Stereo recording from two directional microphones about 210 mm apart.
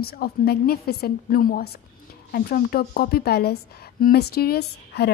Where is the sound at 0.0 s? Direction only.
45° left (ahead or behind).